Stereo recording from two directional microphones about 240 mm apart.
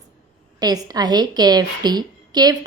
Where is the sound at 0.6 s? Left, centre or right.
Centre.